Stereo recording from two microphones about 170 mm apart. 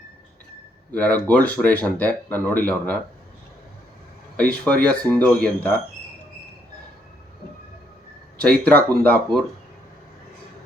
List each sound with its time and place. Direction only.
0.9 s speech: 5° left (ahead or behind)
4.4 s speech: 5° left (ahead or behind)
8.6 s speech: 10° left (ahead or behind)